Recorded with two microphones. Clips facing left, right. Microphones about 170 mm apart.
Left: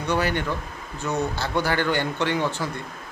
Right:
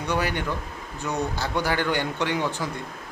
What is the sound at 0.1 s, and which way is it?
A man's voice, 10° right (ahead or behind).